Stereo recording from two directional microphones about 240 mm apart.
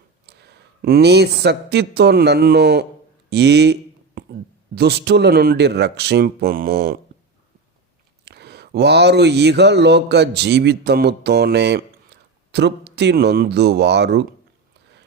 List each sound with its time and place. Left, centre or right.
0.3 s speech: right
3.2 s a sound: right
4.7 s speech: right
8.2 s speech: right